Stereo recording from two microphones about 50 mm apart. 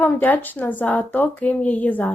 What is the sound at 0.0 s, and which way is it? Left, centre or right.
Speech, left.